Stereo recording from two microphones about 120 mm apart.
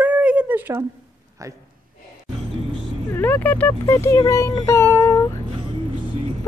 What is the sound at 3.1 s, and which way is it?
Speech, 15° left (ahead or behind).